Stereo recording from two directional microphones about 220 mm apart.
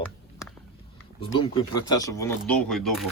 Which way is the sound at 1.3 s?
20° left (ahead or behind).